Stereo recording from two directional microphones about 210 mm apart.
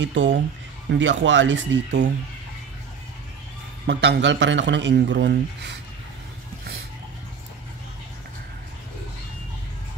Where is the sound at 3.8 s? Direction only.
55° right (ahead or behind).